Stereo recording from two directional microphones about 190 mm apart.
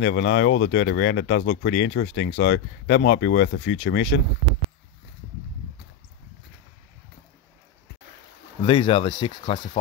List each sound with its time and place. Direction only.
0.0 s speech: 65° left (ahead or behind)
8.6 s speech: 25° left (ahead or behind)